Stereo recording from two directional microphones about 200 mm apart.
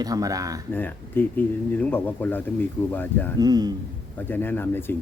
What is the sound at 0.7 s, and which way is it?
Speech, 10° left (ahead or behind).